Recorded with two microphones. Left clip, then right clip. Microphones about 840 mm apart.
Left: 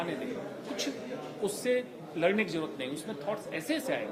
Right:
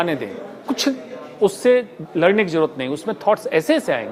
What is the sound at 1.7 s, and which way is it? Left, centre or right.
A woman's voice, right.